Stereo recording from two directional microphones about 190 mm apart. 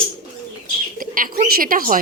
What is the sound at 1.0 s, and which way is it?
A woman's voice, 45° right (ahead or behind).